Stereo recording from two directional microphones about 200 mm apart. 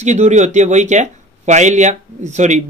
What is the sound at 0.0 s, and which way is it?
Speech, 35° right (ahead or behind).